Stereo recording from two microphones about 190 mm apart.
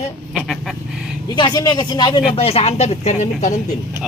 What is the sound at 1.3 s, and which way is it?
Speech, 20° left (ahead or behind).